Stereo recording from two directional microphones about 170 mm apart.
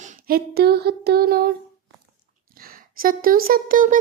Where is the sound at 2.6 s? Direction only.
60° right (ahead or behind).